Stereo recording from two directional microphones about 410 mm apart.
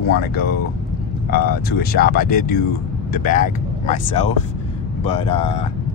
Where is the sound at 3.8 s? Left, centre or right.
Centre.